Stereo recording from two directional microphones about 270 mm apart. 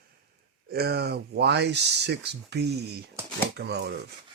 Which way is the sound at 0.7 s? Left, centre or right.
Right.